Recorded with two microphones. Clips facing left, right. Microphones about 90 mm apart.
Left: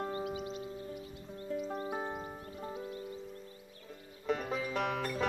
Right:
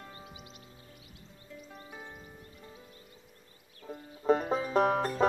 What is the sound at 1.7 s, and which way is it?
Music, 40° left (ahead or behind).